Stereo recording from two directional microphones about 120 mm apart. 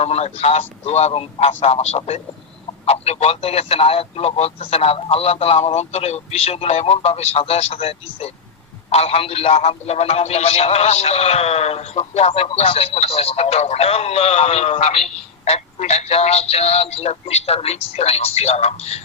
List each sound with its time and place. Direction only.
0.0 s speech: 60° left (ahead or behind)